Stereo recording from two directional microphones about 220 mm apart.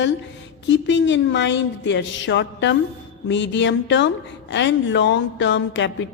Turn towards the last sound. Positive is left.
turn(degrees=55)  # may be behind; listen again after turning